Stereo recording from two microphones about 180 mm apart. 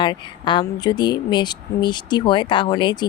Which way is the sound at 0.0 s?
25° left (ahead or behind).